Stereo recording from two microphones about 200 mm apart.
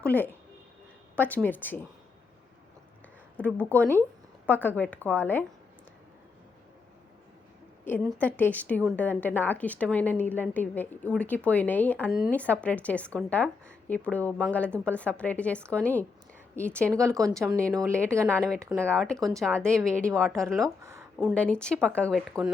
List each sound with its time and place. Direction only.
0.0 s a woman's voice: 10° left (ahead or behind)
3.3 s a woman's voice: 5° left (ahead or behind)
7.9 s a woman's voice: 5° left (ahead or behind)
16.8 s speech: 15° right (ahead or behind)
18.7 s speech: 5° left (ahead or behind)
20.8 s speech: 15° right (ahead or behind)
21.2 s speech: centre (ahead or behind)